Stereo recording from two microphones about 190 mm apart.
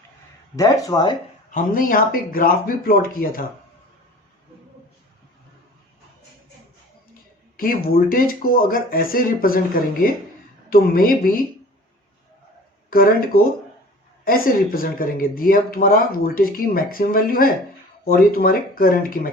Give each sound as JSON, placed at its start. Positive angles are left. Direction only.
{"t": 0.9, "sound": "speech", "side_deg": 20}
{"t": 1.5, "sound": "speech", "side_deg": 45}
{"t": 7.5, "sound": "speech", "side_deg": 50}
{"t": 10.7, "sound": "speech", "side_deg": 50}
{"t": 12.9, "sound": "speech", "side_deg": 50}